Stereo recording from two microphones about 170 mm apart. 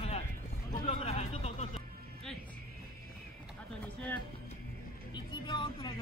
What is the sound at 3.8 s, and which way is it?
Music, 10° left (ahead or behind).